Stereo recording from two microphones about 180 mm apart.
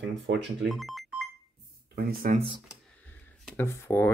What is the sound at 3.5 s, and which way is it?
Speech, 15° left (ahead or behind).